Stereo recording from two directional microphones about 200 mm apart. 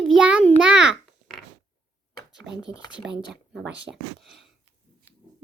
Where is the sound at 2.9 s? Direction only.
Centre (ahead or behind).